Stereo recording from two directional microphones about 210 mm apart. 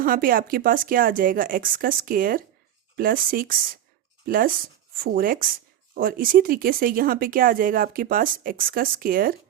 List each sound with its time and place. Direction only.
0.0 s speech: 45° right (ahead or behind)